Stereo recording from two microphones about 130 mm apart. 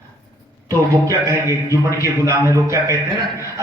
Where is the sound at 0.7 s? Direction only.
25° right (ahead or behind).